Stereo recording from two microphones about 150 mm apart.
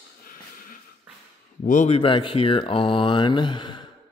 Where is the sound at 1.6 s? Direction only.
60° left (ahead or behind).